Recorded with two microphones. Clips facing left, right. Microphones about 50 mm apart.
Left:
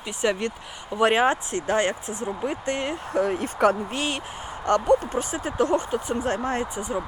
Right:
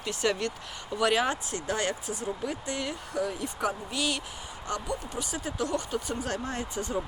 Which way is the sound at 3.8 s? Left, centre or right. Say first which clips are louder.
Left 3 dB; left.